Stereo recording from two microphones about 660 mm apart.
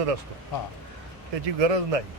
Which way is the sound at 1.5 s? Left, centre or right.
Right.